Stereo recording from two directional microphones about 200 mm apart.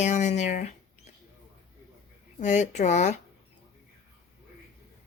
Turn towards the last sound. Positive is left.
turn(degrees=35)  # may be behind; listen again after turning